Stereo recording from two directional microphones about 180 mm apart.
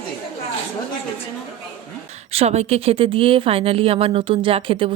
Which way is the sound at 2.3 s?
35° right (ahead or behind).